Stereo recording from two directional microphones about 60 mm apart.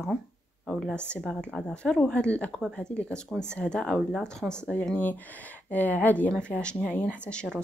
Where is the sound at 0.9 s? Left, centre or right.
Centre.